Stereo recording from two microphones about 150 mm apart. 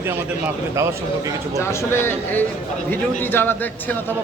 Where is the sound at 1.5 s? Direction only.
15° left (ahead or behind).